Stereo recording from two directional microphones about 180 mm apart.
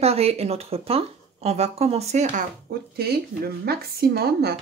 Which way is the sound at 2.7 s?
60° right (ahead or behind).